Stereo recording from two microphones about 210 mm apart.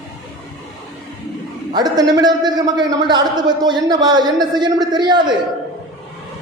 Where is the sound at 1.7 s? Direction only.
20° right (ahead or behind).